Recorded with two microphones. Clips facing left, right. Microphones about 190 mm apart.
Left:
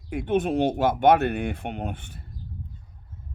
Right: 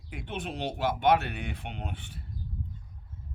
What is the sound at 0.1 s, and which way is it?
Speech, 50° left (ahead or behind).